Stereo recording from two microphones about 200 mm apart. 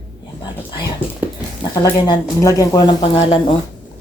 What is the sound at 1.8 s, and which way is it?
Speech, 20° left (ahead or behind).